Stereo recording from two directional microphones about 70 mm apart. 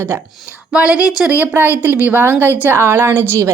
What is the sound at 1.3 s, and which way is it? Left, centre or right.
A woman's voice, right.